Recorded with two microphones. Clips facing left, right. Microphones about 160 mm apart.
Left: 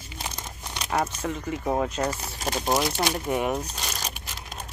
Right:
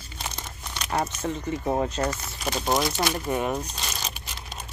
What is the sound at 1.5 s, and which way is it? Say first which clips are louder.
Speech: even; 5° left (ahead or behind).